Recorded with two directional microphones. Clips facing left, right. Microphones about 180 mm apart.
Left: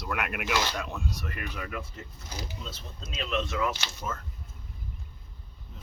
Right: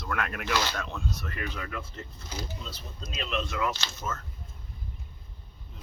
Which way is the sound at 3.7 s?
15° left (ahead or behind).